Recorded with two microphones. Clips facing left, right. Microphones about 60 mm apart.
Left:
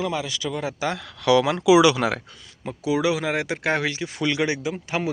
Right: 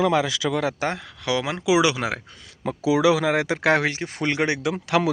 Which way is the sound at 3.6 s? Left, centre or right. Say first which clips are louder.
Right 4 dB; right.